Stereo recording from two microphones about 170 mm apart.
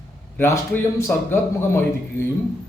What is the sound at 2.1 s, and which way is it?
Speech, 15° left (ahead or behind).